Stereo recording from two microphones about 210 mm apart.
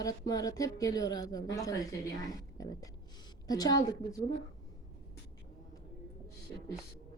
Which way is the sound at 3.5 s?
20° left (ahead or behind).